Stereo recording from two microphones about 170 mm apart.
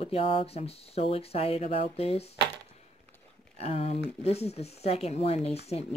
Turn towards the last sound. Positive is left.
turn(degrees=35)  # may be behind; listen again after turning